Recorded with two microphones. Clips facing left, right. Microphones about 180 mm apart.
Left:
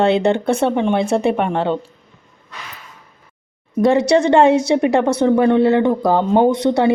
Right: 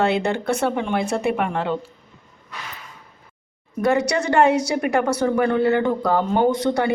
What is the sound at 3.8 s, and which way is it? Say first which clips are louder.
A woman's voice: left 6 dB; 30° left (ahead or behind).